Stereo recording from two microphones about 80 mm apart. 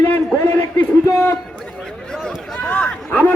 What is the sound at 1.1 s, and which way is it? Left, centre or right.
Speech, left.